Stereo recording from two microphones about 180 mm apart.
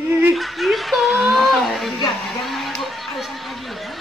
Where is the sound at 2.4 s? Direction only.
Centre (ahead or behind).